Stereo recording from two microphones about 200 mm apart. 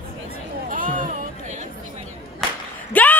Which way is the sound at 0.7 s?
40° right (ahead or behind).